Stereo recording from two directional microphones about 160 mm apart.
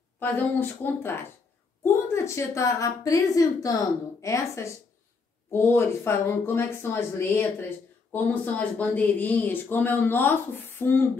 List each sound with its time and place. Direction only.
0.2 s a woman's voice: 10° left (ahead or behind)